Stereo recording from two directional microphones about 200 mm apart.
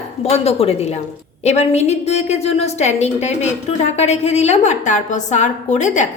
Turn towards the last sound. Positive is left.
turn(degrees=35)  # may be behind; listen again after turning